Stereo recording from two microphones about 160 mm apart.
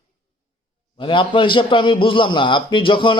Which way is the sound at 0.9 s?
30° left (ahead or behind).